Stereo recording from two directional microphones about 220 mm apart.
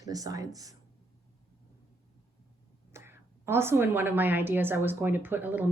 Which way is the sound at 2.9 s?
10° right (ahead or behind).